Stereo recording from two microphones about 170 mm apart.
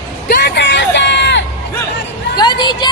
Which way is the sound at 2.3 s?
25° left (ahead or behind).